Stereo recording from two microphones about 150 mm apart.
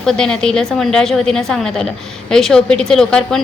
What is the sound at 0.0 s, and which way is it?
A woman's voice, 5° left (ahead or behind).